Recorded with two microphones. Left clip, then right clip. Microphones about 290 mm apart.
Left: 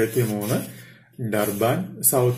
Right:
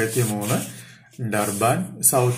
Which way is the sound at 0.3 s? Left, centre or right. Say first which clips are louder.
Right 1 dB; centre.